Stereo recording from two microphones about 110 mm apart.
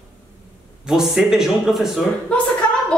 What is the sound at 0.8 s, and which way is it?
A man's voice, 5° right (ahead or behind).